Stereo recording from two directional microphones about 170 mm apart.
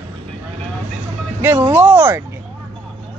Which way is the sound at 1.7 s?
10° right (ahead or behind).